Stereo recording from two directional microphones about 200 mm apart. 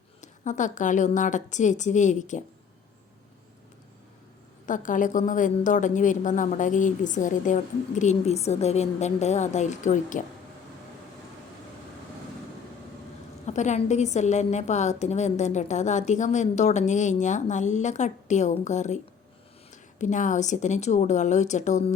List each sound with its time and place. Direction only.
0.2 s a woman's voice: 40° left (ahead or behind)
4.6 s a woman's voice: 40° left (ahead or behind)
13.4 s a woman's voice: 35° left (ahead or behind)